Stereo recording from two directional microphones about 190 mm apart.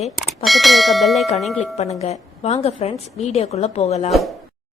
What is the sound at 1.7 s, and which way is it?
Speech, 35° left (ahead or behind).